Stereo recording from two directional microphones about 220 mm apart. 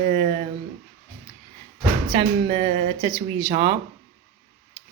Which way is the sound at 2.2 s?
25° right (ahead or behind).